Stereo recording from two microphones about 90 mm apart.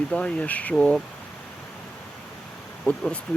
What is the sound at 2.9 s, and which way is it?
Speech, 10° left (ahead or behind).